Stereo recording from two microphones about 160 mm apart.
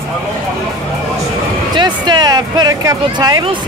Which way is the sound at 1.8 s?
25° right (ahead or behind).